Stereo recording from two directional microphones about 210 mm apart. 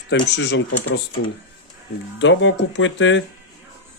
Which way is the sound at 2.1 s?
60° left (ahead or behind).